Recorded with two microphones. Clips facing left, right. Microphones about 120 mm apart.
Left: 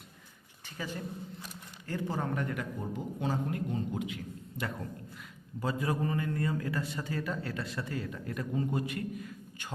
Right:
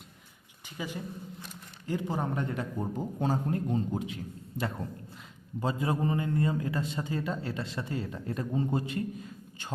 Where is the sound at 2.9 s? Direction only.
40° right (ahead or behind).